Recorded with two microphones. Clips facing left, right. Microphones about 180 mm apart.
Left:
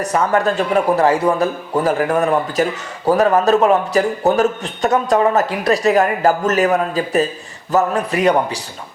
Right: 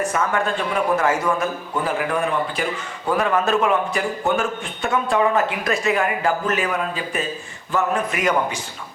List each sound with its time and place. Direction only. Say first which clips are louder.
0.0 s a man's voice: left 5 dB; 40° left (ahead or behind)